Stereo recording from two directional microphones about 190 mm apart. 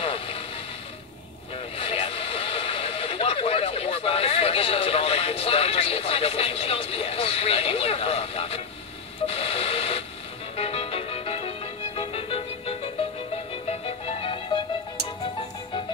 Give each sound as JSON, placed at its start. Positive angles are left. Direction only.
{"t": 0.0, "sound": "vehicle", "side_deg": 30}
{"t": 1.8, "sound": "radio", "side_deg": 30}
{"t": 10.5, "sound": "music", "side_deg": 30}